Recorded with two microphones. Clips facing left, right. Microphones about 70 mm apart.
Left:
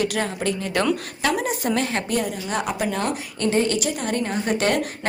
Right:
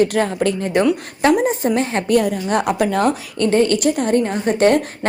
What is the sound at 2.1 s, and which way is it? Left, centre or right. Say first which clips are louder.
A woman's voice: right 8 dB; right.